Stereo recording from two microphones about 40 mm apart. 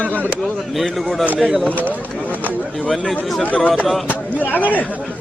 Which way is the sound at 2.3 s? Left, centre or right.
Right.